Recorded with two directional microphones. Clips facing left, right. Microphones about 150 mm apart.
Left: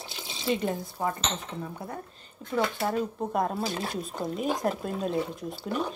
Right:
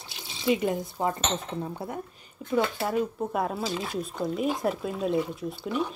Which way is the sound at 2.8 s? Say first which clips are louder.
Right 1 dB; 5° right (ahead or behind).